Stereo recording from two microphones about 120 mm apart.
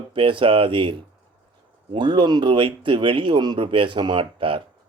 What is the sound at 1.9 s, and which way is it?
Speech, 40° right (ahead or behind).